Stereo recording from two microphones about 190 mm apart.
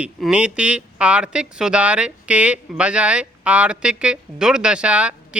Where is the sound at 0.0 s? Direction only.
5° right (ahead or behind).